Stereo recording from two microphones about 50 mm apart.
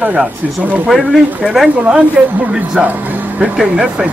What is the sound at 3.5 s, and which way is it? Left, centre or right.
Speech, centre.